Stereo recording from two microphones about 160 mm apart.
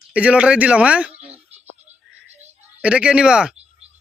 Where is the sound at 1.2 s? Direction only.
40° right (ahead or behind).